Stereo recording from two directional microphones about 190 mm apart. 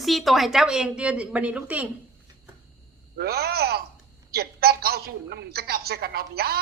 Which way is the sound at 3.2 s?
55° right (ahead or behind).